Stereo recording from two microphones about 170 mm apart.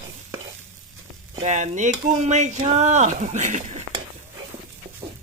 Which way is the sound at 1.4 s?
45° right (ahead or behind).